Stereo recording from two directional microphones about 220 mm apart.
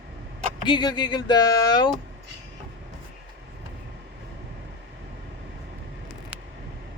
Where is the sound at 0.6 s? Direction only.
20° left (ahead or behind).